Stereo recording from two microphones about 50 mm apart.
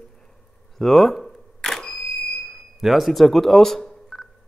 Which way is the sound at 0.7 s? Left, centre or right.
Centre.